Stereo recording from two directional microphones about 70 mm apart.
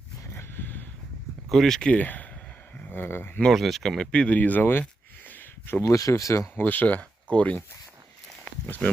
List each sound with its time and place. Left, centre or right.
0.3 s a sound: left
1.5 s speech: centre
1.9 s speech: left
3.5 s speech: centre; by 4.9 s left
5.3 s a sound: left
5.9 s speech: left
6.6 s speech: left
8.6 s speech: left